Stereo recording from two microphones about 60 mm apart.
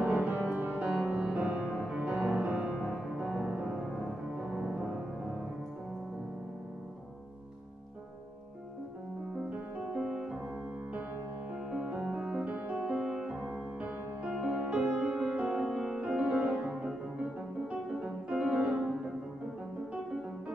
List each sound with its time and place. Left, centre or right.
0.0 s music: right
9.5 s music: centre
11.7 s music: right
17.6 s music: centre